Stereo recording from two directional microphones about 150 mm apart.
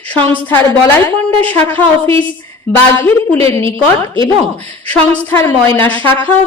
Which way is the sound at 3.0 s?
20° left (ahead or behind).